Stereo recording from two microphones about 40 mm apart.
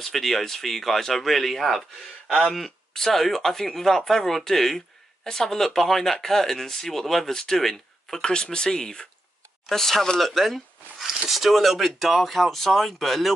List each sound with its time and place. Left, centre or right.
0.0 s speech: centre
8.2 s speech: left